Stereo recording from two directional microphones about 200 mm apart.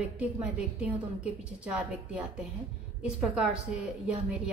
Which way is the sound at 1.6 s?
5° right (ahead or behind).